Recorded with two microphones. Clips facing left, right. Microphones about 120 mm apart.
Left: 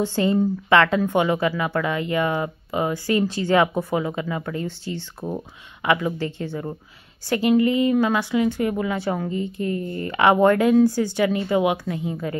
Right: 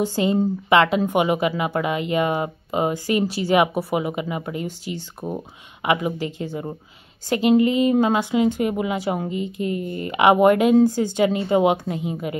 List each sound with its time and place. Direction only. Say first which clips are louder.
0.0 s speech: even; 15° right (ahead or behind)
5.8 s speech: even; 20° right (ahead or behind)